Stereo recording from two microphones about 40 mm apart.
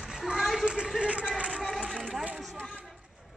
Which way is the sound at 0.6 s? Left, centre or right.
Right.